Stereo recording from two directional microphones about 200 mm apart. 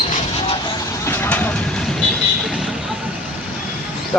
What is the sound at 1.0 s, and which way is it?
Vehicle, 10° left (ahead or behind).